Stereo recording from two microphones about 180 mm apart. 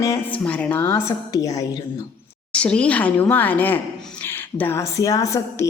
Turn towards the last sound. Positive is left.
turn(degrees=15)  # may be behind; listen again after turning